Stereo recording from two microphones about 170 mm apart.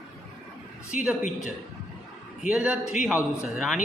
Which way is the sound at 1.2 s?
45° left (ahead or behind).